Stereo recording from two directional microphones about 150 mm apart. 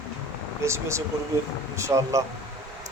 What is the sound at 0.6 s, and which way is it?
Speech, 20° right (ahead or behind).